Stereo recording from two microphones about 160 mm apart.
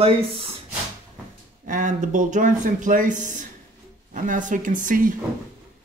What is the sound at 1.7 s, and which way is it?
Speech, 50° right (ahead or behind).